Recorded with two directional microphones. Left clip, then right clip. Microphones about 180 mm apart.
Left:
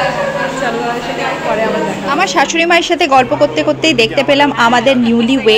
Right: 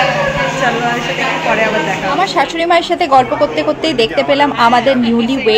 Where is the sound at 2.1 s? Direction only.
30° left (ahead or behind).